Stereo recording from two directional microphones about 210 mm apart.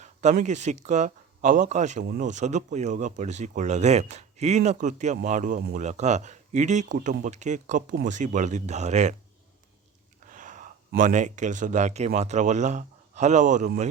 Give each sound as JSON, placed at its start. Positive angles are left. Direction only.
{"t": 0.0, "sound": "speech", "side_deg": -35}
{"t": 10.2, "sound": "speech", "side_deg": -40}